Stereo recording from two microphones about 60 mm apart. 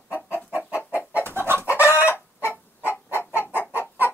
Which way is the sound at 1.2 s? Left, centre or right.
Right.